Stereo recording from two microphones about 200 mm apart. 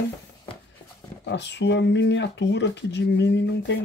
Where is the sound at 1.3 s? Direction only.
60° left (ahead or behind).